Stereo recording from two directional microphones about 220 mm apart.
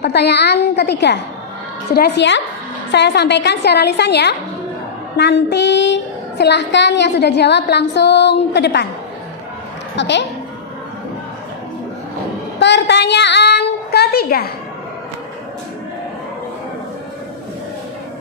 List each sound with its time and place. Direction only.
0.0 s a woman's voice: 50° left (ahead or behind)
9.9 s a woman's voice: 50° left (ahead or behind)
12.5 s a woman's voice: 50° left (ahead or behind)